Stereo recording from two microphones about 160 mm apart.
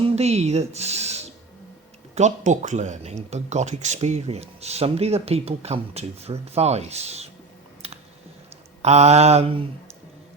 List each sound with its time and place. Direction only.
0.2 s speech: 40° right (ahead or behind)
8.8 s mantra: 40° right (ahead or behind)